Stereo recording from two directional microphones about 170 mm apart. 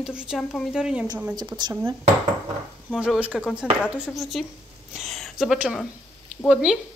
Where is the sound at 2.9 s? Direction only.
5° right (ahead or behind).